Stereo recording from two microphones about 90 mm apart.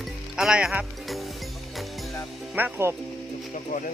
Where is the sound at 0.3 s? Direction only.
5° right (ahead or behind).